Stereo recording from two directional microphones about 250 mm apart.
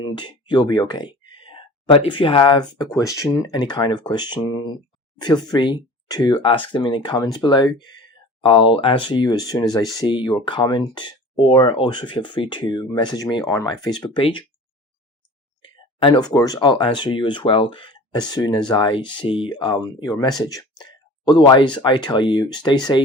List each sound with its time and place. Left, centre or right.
0.0 s speech: centre
15.6 s speech: centre